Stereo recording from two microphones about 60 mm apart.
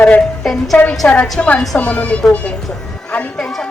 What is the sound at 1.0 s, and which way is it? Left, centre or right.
Speech, left.